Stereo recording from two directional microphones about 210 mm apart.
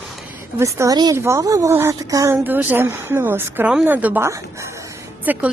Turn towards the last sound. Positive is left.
turn(degrees=-10)  # may be behind; listen again after turning